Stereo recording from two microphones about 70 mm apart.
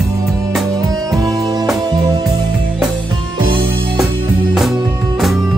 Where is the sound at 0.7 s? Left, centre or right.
Right.